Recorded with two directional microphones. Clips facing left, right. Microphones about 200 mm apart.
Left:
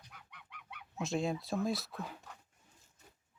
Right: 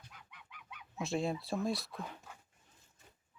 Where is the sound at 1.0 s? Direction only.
Centre (ahead or behind).